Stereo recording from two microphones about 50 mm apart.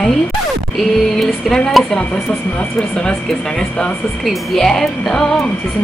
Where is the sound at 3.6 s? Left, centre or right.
Left.